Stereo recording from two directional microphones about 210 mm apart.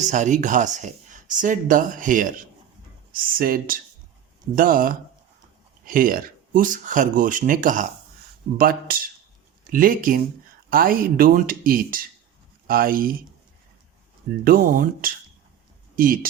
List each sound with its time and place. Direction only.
0.0 s speech: 35° right (ahead or behind)
14.4 s speech: 40° right (ahead or behind)